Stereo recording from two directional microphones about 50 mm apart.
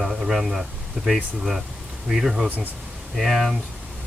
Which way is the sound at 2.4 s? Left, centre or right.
Right.